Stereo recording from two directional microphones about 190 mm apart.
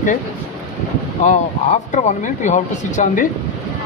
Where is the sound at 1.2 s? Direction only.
40° left (ahead or behind).